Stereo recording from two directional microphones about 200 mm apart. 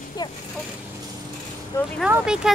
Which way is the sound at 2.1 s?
5° right (ahead or behind).